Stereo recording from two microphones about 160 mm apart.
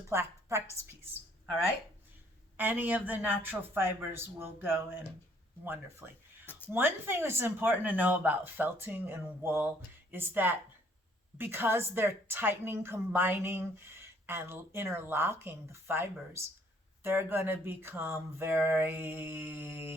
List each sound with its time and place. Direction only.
0.1 s a woman's voice: 15° right (ahead or behind)
2.6 s a woman's voice: 10° right (ahead or behind)
6.4 s a sound: 10° left (ahead or behind)
6.7 s a woman's voice: 15° right (ahead or behind)